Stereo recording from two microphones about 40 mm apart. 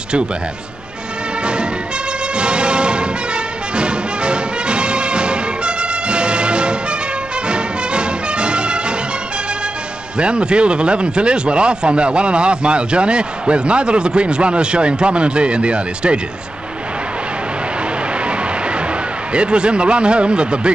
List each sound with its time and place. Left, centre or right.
1.4 s music: right
10.1 s speech: right
19.3 s speech: right